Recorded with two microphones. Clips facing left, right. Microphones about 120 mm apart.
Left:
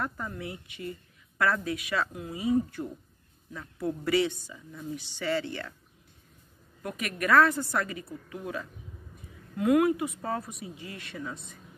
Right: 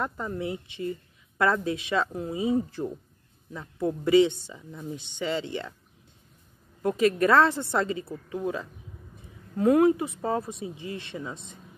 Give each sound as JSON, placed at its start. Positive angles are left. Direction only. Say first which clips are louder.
{"t": 0.0, "sound": "speech", "louder": "right 4 dB", "side_deg": -25}
{"t": 6.8, "sound": "speech", "louder": "right 11 dB", "side_deg": -25}